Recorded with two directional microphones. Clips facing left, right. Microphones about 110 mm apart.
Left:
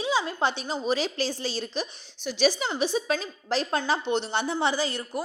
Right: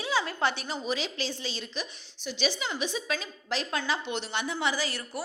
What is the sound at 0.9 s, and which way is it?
A woman's voice, 40° left (ahead or behind).